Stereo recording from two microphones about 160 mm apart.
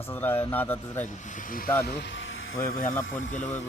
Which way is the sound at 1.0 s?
60° left (ahead or behind).